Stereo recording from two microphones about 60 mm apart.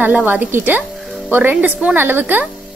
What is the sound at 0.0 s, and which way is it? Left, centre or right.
A woman's voice, right.